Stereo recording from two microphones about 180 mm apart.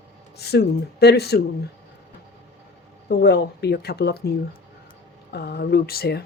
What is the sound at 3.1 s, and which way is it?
A woman's voice, 65° left (ahead or behind).